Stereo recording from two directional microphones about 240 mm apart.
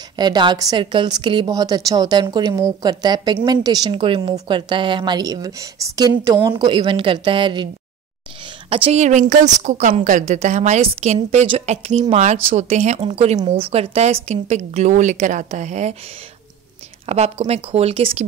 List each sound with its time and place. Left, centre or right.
0.2 s a woman's voice: centre
17.0 s a woman's voice: right